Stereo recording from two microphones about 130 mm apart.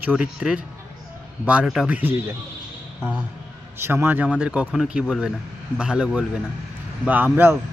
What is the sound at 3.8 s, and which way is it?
Speech, 15° right (ahead or behind).